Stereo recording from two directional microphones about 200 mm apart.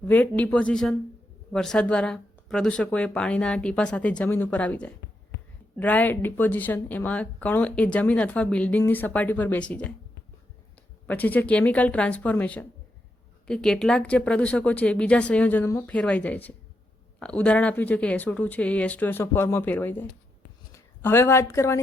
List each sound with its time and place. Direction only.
0.0 s speech: 10° left (ahead or behind)
11.0 s a woman's voice: 10° left (ahead or behind)